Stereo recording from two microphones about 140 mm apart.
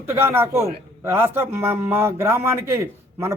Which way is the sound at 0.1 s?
15° right (ahead or behind).